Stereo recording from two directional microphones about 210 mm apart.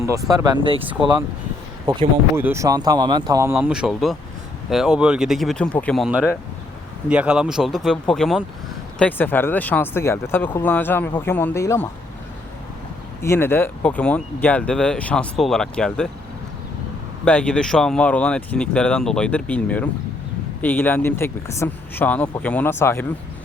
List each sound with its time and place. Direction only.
0.1 s speech: 15° right (ahead or behind)
1.9 s speech: 20° right (ahead or behind)
3.5 s speech: 5° right (ahead or behind); by 11.9 s 15° left (ahead or behind)
13.2 s speech: 10° left (ahead or behind)
17.2 s speech: 5° left (ahead or behind)